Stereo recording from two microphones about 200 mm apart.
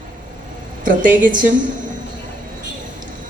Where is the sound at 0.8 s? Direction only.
40° right (ahead or behind).